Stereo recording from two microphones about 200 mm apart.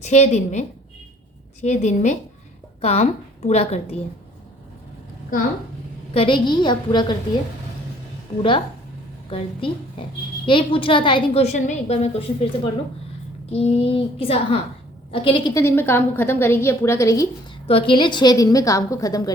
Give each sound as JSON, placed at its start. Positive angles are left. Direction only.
{"t": 0.0, "sound": "a woman's voice", "side_deg": 35}
{"t": 1.6, "sound": "a woman's voice", "side_deg": 35}
{"t": 6.1, "sound": "a woman's voice", "side_deg": 25}
{"t": 8.4, "sound": "a woman's voice", "side_deg": 25}
{"t": 13.5, "sound": "a woman's voice", "side_deg": 30}
{"t": 17.7, "sound": "a woman's voice", "side_deg": 25}